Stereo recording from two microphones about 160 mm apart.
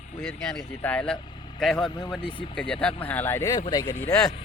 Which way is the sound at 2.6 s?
5° left (ahead or behind).